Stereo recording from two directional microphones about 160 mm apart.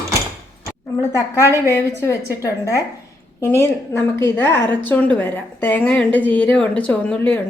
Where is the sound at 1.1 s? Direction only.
15° left (ahead or behind).